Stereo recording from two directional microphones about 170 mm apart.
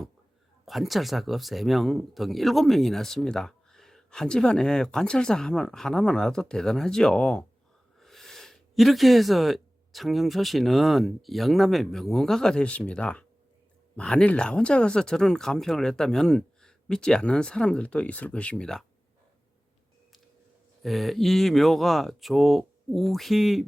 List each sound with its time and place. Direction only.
0.6 s speech: centre (ahead or behind)
20.8 s speech: centre (ahead or behind)